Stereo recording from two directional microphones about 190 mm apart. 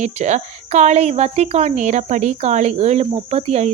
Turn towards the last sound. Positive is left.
turn(degrees=-35)  # may be behind; listen again after turning